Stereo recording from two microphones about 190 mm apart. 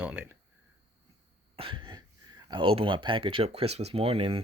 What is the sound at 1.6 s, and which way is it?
Speech, 25° right (ahead or behind).